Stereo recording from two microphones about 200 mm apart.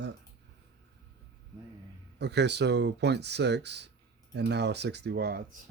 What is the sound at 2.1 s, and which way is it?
Speech, 60° right (ahead or behind).